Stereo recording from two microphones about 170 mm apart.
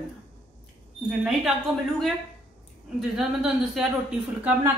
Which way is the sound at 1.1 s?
5° right (ahead or behind).